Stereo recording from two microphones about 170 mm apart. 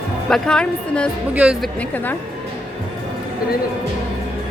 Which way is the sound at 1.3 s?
5° right (ahead or behind).